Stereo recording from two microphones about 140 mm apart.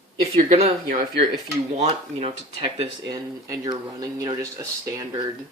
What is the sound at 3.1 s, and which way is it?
Speech, 25° right (ahead or behind).